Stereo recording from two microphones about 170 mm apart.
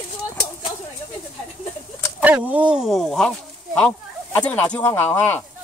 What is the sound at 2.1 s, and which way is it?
Speech, 10° right (ahead or behind).